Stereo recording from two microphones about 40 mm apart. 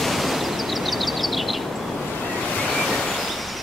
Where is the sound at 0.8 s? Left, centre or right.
Centre.